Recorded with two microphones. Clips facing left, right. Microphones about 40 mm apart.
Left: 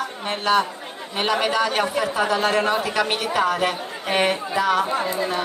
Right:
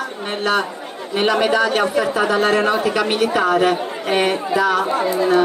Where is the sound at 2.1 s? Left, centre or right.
Centre.